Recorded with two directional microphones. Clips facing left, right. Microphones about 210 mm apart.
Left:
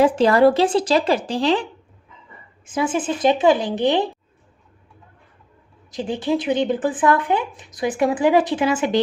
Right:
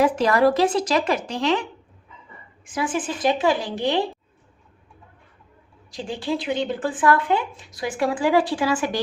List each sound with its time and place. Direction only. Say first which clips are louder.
0.0 s a woman's voice: left 4 dB; 30° left (ahead or behind)
2.6 s speech: left 4 dB; 25° left (ahead or behind)
5.9 s speech: left 5 dB; 20° left (ahead or behind)